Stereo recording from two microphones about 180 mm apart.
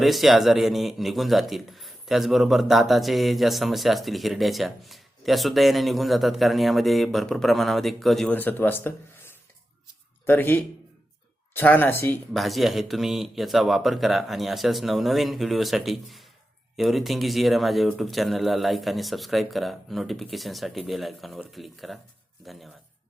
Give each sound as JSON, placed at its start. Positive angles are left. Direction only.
{"t": 0.0, "sound": "a man's voice", "side_deg": 0}
{"t": 12.3, "sound": "a man's voice", "side_deg": 0}